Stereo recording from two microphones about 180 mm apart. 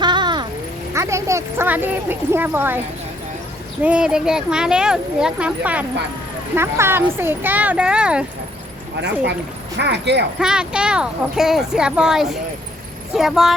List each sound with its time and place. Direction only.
0.0 s a sound: 25° right (ahead or behind)
0.9 s speech: 15° right (ahead or behind)
3.8 s speech: 5° right (ahead or behind)
9.0 s speech: 70° right (ahead or behind)
10.4 s speech: 5° right (ahead or behind)